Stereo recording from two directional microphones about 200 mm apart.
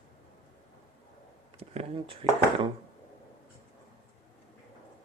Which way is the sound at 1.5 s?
30° right (ahead or behind).